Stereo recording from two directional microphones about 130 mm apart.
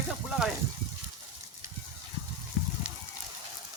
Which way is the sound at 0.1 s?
5° right (ahead or behind).